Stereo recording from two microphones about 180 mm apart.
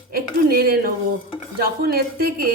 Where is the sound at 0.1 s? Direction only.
55° right (ahead or behind).